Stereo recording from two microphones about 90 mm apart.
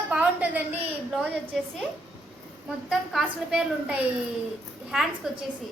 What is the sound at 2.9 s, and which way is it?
A woman's voice, 5° right (ahead or behind).